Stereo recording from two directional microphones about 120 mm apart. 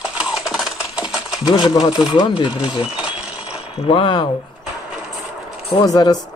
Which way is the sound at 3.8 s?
50° left (ahead or behind).